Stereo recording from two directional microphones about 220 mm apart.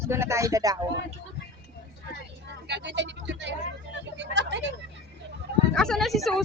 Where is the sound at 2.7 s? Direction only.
50° right (ahead or behind).